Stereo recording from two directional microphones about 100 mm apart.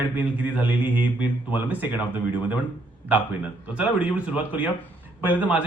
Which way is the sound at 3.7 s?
15° right (ahead or behind).